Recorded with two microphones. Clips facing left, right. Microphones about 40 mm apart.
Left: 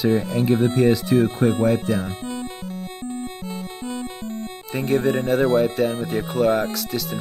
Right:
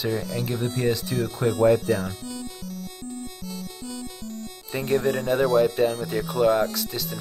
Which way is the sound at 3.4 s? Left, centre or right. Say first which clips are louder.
Left 5 dB; left.